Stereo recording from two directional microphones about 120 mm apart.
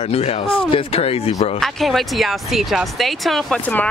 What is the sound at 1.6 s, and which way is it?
Speech, centre (ahead or behind).